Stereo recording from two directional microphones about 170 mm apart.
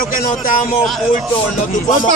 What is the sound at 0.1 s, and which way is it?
Speech, 55° left (ahead or behind).